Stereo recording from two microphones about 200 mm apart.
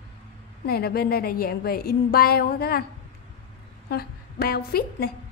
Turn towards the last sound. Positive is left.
turn(degrees=50)  # may be behind; listen again after turning